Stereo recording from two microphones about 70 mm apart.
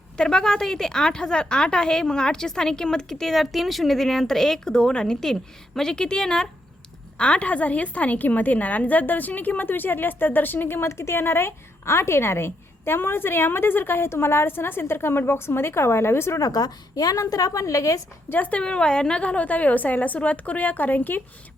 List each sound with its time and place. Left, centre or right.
0.2 s a woman's voice: centre; by 16.4 s left
16.4 s a woman's voice: left
18.3 s a woman's voice: left